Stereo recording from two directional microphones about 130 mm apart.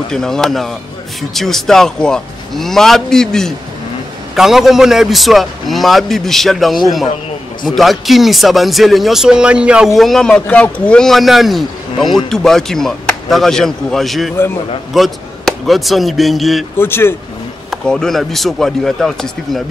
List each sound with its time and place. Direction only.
0.1 s speech: 5° left (ahead or behind)
16.7 s speech: 20° left (ahead or behind)
17.6 s speech: 5° left (ahead or behind)